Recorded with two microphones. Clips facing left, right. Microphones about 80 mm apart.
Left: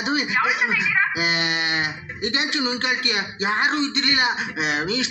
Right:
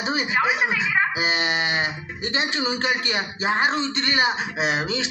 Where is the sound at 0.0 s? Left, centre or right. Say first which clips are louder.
Left 1 dB; right.